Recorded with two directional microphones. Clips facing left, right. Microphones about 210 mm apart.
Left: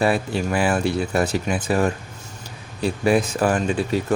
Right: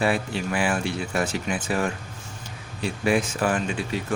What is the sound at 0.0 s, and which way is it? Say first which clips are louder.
Speech: left 4 dB; 40° left (ahead or behind).